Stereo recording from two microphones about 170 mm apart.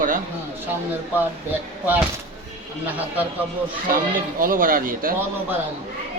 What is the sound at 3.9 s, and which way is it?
Speech, 55° right (ahead or behind).